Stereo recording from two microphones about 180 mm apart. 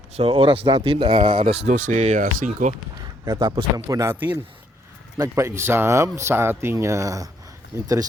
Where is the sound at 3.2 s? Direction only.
25° right (ahead or behind).